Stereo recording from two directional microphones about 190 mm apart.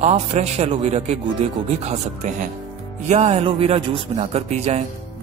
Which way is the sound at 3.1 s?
35° right (ahead or behind).